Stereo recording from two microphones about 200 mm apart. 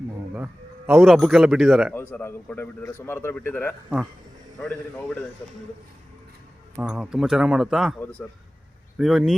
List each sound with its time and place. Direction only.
0.3 s a man's voice: 5° right (ahead or behind)
1.9 s a man's voice: 10° left (ahead or behind)
6.7 s a man's voice: 5° right (ahead or behind)
7.9 s speech: 10° left (ahead or behind)
9.0 s a man's voice: centre (ahead or behind)